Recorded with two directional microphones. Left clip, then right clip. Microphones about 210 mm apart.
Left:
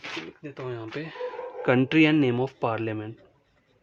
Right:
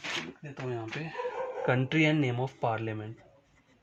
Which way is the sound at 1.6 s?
50° left (ahead or behind).